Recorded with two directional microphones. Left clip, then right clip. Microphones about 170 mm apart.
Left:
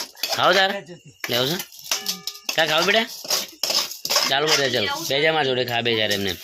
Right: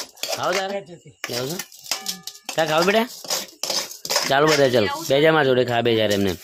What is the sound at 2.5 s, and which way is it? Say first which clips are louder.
Speech: even; 45° right (ahead or behind).